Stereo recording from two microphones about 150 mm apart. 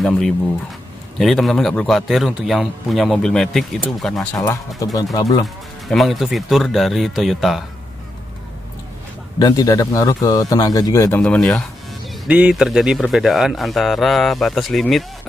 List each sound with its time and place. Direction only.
1.2 s a man's voice: centre (ahead or behind)
4.4 s speech: 25° left (ahead or behind)
5.9 s a man's voice: centre (ahead or behind)
9.4 s speech: 25° left (ahead or behind)
11.1 s a man's voice: 5° left (ahead or behind)
12.3 s a man's voice: 10° right (ahead or behind)